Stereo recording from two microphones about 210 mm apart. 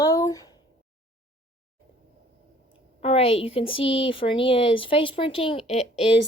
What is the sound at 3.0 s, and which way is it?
A woman's voice, 30° left (ahead or behind).